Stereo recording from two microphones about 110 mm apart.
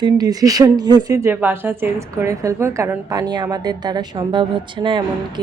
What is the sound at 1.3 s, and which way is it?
A woman's voice, 20° right (ahead or behind).